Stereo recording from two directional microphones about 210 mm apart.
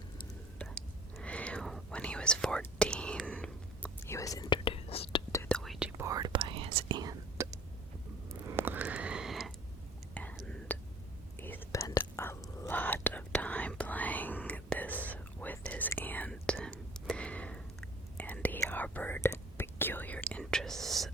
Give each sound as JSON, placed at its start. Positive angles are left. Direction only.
{"t": 0.6, "sound": "whispering", "side_deg": 5}
{"t": 5.3, "sound": "whispering", "side_deg": 10}
{"t": 6.0, "sound": "whispering", "side_deg": -15}
{"t": 8.4, "sound": "a sound", "side_deg": -10}
{"t": 10.2, "sound": "whispering", "side_deg": 5}